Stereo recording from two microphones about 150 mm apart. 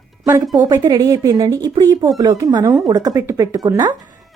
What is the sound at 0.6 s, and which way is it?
Speech, 25° right (ahead or behind).